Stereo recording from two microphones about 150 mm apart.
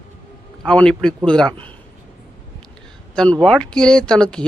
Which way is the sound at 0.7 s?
5° left (ahead or behind).